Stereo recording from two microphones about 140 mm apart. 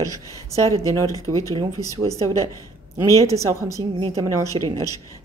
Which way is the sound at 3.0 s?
25° left (ahead or behind).